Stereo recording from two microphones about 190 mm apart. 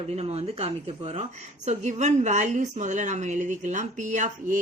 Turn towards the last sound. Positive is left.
turn(degrees=-40)  # may be behind; listen again after turning